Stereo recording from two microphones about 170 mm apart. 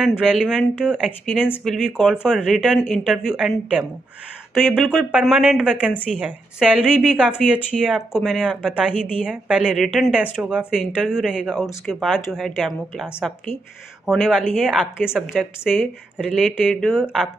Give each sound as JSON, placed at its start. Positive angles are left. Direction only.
{"t": 0.2, "sound": "speech", "side_deg": -5}
{"t": 1.4, "sound": "speech", "side_deg": 5}